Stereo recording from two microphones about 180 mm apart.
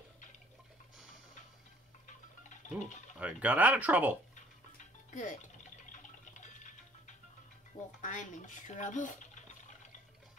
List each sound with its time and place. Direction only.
2.0 s music: 40° left (ahead or behind)
3.2 s speech: 10° right (ahead or behind)
4.7 s music: 45° left (ahead or behind)
5.9 s a sound: 45° left (ahead or behind)
8.0 s speech: 45° left (ahead or behind)